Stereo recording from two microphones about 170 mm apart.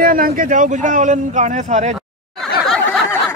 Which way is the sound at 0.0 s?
55° right (ahead or behind).